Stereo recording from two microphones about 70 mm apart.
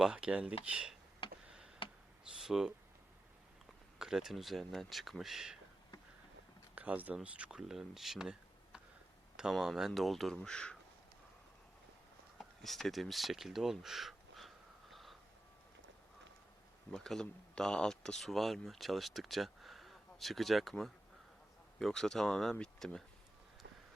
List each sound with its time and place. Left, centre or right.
0.0 s speech: centre
2.4 s speech: centre
3.9 s speech: centre
6.7 s speech: right
7.6 s speech: centre
10.3 s speech: centre
12.4 s a sound: centre
16.9 s speech: centre